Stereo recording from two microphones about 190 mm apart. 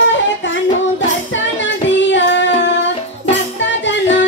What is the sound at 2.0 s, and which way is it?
Child singing, 75° left (ahead or behind).